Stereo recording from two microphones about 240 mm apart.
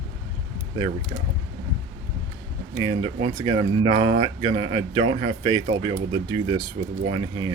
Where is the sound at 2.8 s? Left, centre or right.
Centre.